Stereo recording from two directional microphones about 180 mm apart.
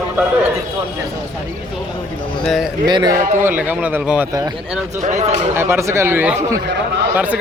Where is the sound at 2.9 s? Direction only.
25° right (ahead or behind).